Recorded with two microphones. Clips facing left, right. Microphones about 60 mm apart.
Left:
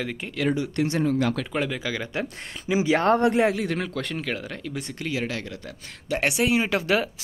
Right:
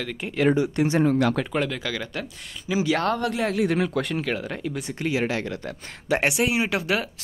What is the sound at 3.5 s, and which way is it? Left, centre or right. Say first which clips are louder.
Speech: right 5 dB; centre.